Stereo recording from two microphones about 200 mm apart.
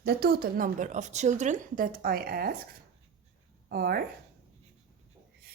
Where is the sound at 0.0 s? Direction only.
50° right (ahead or behind).